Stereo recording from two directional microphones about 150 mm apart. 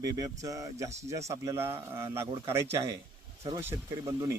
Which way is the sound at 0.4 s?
25° right (ahead or behind).